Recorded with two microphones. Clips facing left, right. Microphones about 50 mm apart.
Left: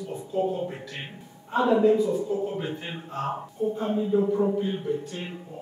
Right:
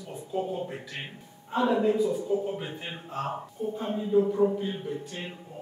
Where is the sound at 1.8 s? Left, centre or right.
Centre.